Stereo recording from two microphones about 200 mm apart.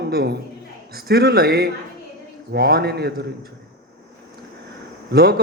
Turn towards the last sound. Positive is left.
turn(degrees=-50)  # may be behind; listen again after turning